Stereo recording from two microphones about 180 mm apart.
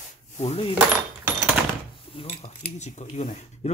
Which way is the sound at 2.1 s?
35° left (ahead or behind).